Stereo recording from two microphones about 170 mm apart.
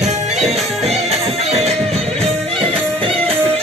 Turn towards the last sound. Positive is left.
turn(degrees=-35)  # may be behind; listen again after turning